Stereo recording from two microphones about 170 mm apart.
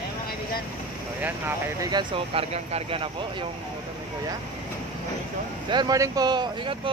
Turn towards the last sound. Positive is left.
turn(degrees=-25)  # may be behind; listen again after turning